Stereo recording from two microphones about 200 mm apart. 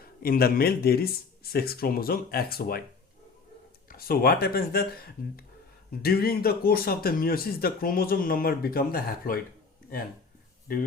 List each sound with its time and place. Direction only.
0.0 s speech: 50° left (ahead or behind)
3.8 s speech: 50° left (ahead or behind)
6.0 s speech: 50° left (ahead or behind)